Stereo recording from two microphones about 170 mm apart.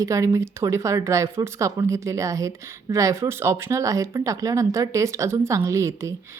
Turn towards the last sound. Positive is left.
turn(degrees=-20)  # may be behind; listen again after turning